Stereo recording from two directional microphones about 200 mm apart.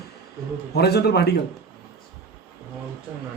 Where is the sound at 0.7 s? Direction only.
55° left (ahead or behind).